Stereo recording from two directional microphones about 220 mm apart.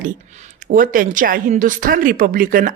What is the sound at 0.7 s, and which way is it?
Speech, 40° right (ahead or behind).